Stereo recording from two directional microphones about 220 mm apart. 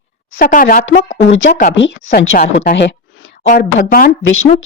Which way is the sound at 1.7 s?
55° left (ahead or behind).